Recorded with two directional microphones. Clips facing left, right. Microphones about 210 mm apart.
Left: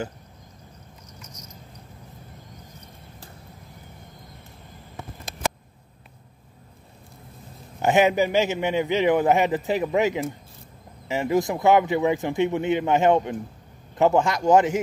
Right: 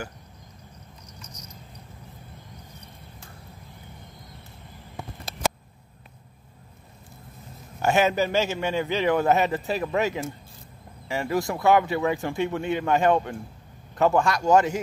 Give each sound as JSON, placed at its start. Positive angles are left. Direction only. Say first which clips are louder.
{"t": 7.8, "sound": "a man's voice", "louder": "left 3 dB", "side_deg": 15}